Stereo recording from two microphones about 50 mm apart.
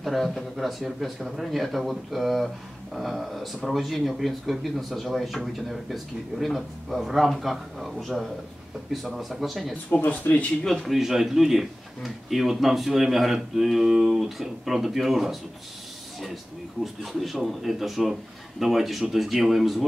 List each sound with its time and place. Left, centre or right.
0.0 s a man's voice: centre
9.8 s speech: left
10.6 s a man's voice: centre
11.0 s a man's voice: centre
16.8 s a man's voice: centre